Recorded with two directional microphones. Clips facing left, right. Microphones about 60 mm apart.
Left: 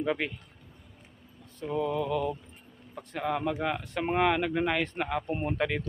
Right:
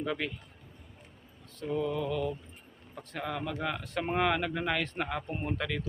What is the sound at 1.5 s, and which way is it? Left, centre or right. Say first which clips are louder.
Mantra: left 2 dB; centre.